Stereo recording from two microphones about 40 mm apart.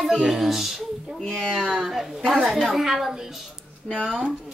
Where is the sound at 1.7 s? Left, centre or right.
Centre.